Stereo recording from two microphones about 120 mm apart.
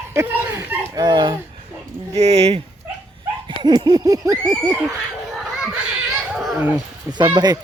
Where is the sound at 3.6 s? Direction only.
35° right (ahead or behind).